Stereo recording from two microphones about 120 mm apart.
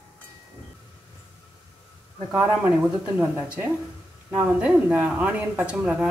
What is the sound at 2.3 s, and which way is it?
Speech, 10° right (ahead or behind).